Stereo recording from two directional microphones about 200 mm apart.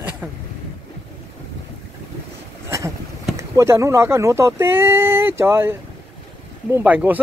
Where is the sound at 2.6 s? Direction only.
15° right (ahead or behind).